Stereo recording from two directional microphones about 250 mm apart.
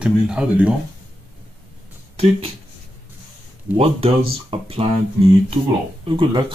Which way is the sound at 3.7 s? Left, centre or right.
Right.